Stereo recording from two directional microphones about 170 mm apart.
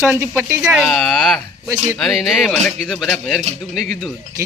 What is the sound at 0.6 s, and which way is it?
Speech, centre (ahead or behind).